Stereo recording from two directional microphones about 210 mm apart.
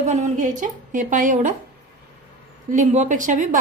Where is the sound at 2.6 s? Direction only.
35° right (ahead or behind).